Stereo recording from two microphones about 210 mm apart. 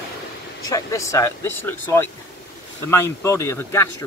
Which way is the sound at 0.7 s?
15° left (ahead or behind).